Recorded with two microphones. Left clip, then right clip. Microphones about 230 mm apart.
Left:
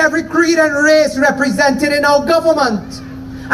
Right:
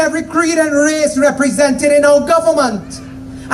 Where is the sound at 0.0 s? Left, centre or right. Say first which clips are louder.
Left 1 dB; right.